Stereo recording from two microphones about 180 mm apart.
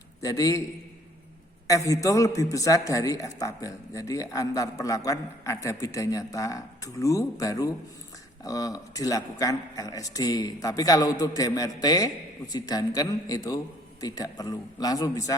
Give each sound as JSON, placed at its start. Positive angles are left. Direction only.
{"t": 0.2, "sound": "speech", "side_deg": 20}
{"t": 1.6, "sound": "speech", "side_deg": 20}